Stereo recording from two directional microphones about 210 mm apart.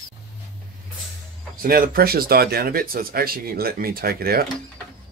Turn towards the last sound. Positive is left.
turn(degrees=-45)  # may be behind; listen again after turning